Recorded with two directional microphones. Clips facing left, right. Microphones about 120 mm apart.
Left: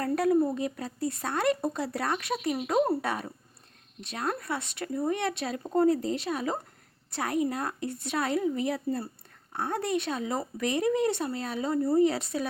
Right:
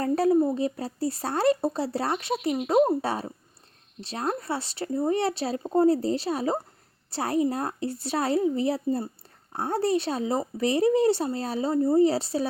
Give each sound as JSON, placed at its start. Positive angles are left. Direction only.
{"t": 0.0, "sound": "speech", "side_deg": -25}